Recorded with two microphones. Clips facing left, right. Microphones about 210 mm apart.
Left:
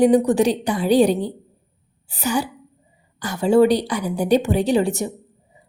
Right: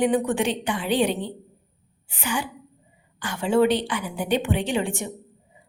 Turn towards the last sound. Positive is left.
turn(degrees=40)  # may be behind; listen again after turning